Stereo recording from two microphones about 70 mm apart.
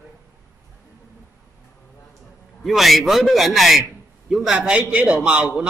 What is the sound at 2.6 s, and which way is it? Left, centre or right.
A man's voice, centre.